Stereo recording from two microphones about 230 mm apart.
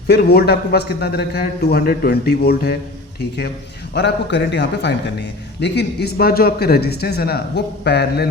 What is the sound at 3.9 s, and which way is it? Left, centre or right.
A man's voice, left.